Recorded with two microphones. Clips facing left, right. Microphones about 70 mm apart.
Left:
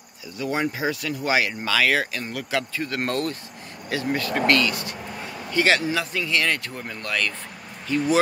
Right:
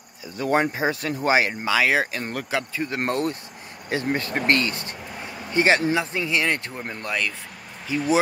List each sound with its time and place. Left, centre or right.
0.4 s speech: right; by 8.0 s centre